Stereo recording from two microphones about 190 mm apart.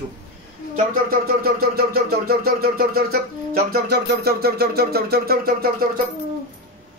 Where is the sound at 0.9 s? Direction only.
50° right (ahead or behind).